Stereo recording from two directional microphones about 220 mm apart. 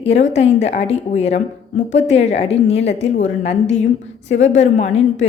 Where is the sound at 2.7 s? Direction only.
55° left (ahead or behind).